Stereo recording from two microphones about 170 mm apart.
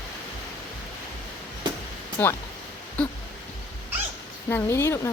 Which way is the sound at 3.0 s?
5° left (ahead or behind).